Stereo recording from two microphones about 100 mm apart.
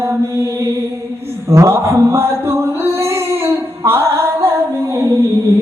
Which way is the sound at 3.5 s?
25° right (ahead or behind).